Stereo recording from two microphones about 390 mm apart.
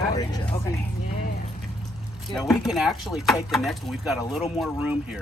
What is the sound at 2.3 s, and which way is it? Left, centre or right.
Chopping, centre.